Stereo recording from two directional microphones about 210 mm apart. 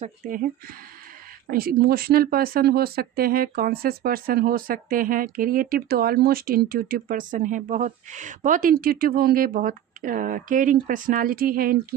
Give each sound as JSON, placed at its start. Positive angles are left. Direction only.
{"t": 0.0, "sound": "speech", "side_deg": -40}
{"t": 1.5, "sound": "speech", "side_deg": -45}